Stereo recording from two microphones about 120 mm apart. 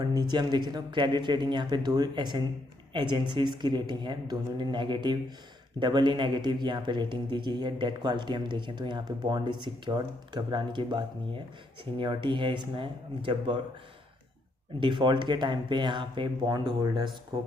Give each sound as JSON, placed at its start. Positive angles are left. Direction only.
{"t": 0.0, "sound": "a man's voice", "side_deg": -35}
{"t": 14.8, "sound": "a man's voice", "side_deg": -40}